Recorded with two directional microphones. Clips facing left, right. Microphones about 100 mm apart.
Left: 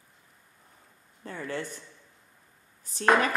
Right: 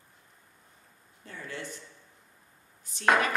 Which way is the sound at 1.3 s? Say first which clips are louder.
Left 5 dB; 45° left (ahead or behind).